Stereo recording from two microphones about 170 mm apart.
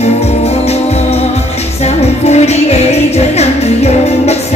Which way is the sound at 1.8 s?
40° left (ahead or behind).